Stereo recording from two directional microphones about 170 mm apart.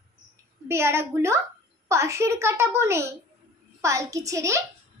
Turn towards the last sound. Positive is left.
turn(degrees=-20)  # may be behind; listen again after turning